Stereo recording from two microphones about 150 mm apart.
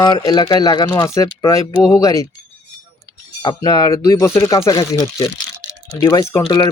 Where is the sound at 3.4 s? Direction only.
25° left (ahead or behind).